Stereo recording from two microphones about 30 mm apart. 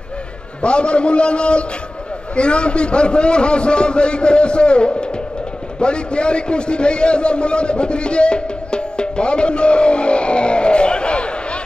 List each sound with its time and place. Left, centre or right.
0.6 s a man's voice: left